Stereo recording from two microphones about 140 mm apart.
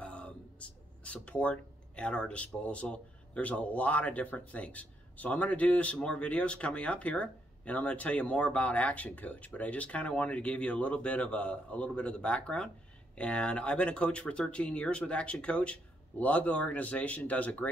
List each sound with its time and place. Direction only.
0.0 s speech: 10° left (ahead or behind)